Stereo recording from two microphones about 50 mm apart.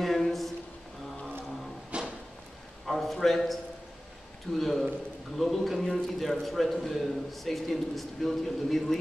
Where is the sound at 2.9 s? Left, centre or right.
Centre.